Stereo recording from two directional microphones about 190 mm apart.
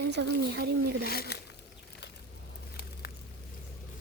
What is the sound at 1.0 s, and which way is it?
Speech, 55° left (ahead or behind).